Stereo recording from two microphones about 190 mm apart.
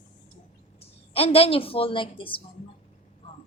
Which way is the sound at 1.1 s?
30° left (ahead or behind).